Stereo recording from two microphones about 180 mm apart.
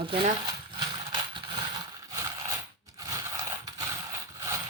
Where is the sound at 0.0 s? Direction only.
30° right (ahead or behind).